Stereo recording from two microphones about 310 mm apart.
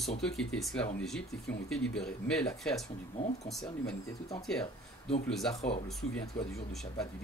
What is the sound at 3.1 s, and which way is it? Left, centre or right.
Speech, left.